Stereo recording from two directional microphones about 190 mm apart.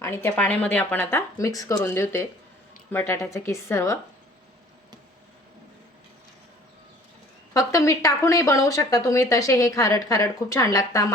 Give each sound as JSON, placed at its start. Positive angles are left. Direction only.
{"t": 0.0, "sound": "speech", "side_deg": 10}
{"t": 7.5, "sound": "speech", "side_deg": 15}